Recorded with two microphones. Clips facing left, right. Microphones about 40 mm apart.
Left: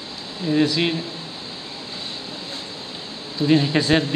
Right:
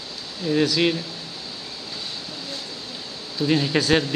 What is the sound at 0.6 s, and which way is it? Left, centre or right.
Speech, left.